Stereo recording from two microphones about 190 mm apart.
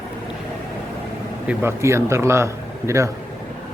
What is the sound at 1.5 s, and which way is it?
A man's voice, 10° right (ahead or behind).